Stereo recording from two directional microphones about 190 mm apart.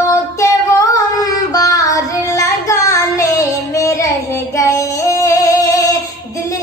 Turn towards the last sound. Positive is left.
turn(degrees=20)  # may be behind; listen again after turning